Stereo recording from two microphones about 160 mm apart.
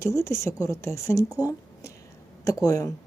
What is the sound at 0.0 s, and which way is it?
A woman's voice, 15° left (ahead or behind).